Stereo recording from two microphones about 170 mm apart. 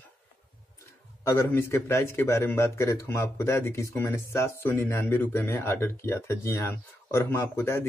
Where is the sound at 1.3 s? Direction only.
15° left (ahead or behind).